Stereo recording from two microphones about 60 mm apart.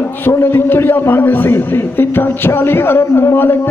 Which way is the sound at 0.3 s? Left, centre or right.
Left.